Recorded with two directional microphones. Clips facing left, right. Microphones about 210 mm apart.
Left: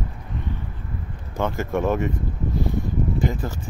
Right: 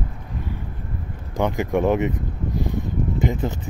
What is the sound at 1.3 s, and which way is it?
Speech, 15° right (ahead or behind).